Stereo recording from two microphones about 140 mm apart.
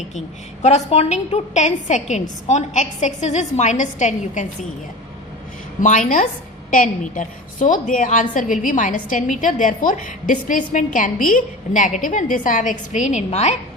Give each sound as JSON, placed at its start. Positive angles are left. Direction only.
{"t": 0.6, "sound": "a woman's voice", "side_deg": 50}
{"t": 5.8, "sound": "a woman's voice", "side_deg": 65}